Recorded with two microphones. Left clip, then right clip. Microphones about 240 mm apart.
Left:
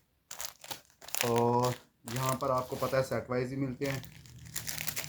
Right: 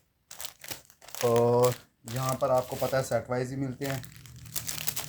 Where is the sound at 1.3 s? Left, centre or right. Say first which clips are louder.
Right 5 dB; right.